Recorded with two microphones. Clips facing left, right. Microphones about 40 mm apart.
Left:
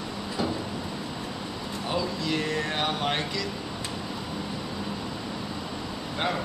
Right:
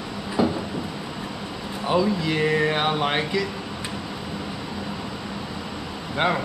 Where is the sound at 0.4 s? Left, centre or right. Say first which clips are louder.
Right 7 dB; centre.